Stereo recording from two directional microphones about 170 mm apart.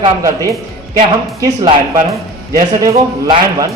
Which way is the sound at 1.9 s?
20° right (ahead or behind).